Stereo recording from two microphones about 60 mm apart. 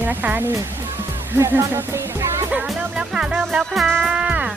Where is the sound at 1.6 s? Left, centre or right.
Right.